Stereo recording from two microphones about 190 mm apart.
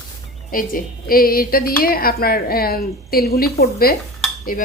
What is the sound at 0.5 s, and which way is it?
Speech, 50° left (ahead or behind).